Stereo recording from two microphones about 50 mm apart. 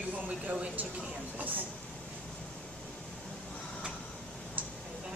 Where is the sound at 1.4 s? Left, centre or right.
Right.